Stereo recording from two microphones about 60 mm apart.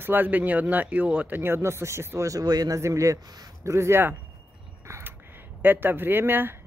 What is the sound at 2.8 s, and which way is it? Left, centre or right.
A man's voice, right.